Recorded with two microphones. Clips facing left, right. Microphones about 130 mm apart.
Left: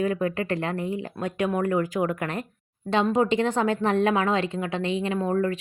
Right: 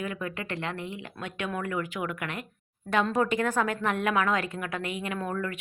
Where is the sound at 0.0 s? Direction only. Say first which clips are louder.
Left 9 dB; 35° left (ahead or behind).